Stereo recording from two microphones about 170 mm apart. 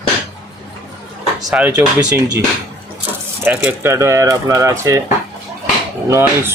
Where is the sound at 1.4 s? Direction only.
5° right (ahead or behind).